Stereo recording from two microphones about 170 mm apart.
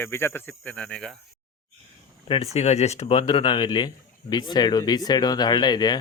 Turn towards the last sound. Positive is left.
turn(degrees=25)  # may be behind; listen again after turning